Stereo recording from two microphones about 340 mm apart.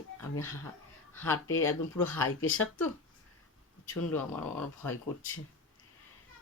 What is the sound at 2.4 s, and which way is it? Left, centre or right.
Speech, left.